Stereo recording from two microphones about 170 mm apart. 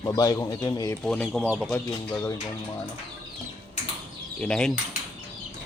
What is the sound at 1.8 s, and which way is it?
Speech, 15° left (ahead or behind).